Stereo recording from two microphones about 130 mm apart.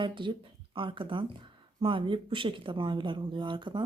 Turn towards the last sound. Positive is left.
turn(degrees=-35)  # may be behind; listen again after turning